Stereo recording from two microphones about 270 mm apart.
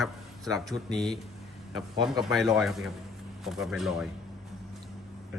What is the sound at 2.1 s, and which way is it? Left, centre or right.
Speech, centre.